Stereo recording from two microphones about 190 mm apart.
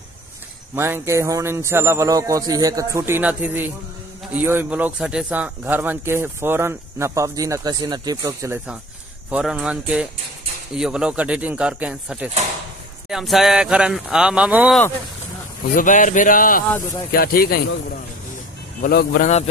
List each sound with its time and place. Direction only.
0.7 s a man's voice: 15° right (ahead or behind)
9.3 s speech: 5° right (ahead or behind)
15.7 s speech: 45° left (ahead or behind)
16.7 s speech: 15° left (ahead or behind)
17.1 s speech: 50° left (ahead or behind)
18.8 s speech: 50° left (ahead or behind)